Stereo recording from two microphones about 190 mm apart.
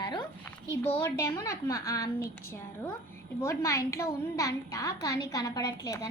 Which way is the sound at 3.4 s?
15° left (ahead or behind).